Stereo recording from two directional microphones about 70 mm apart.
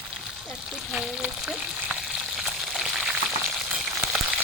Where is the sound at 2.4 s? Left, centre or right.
Centre.